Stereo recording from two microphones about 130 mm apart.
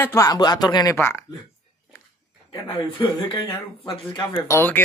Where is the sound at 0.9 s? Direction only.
20° left (ahead or behind).